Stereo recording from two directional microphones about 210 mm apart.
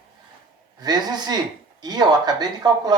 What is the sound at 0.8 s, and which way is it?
Speech, 20° right (ahead or behind).